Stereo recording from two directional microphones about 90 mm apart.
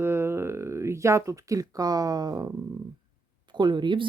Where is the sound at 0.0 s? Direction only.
25° right (ahead or behind); by 2.5 s 45° right (ahead or behind).